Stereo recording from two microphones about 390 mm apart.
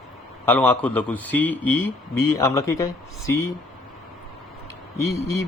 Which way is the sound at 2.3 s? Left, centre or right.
Centre.